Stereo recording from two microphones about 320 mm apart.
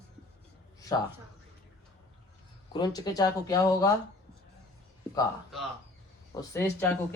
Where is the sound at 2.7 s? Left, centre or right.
Centre.